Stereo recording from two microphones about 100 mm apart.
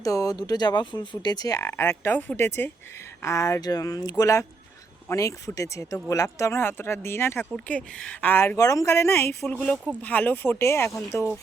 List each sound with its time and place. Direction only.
0.0 s speech: 35° left (ahead or behind)
1.6 s speech: 25° left (ahead or behind)
7.5 s speech: 10° left (ahead or behind)
8.5 s speech: 35° left (ahead or behind)
9.5 s speech: 15° left (ahead or behind)